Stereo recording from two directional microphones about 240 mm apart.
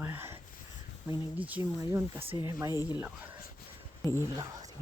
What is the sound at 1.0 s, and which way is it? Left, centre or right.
Speech, centre.